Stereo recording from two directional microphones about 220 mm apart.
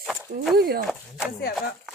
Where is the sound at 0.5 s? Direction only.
45° right (ahead or behind).